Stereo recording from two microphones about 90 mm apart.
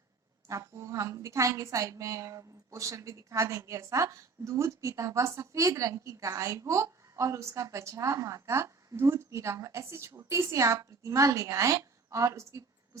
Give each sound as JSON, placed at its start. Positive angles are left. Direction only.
{"t": 0.4, "sound": "a woman's voice", "side_deg": -35}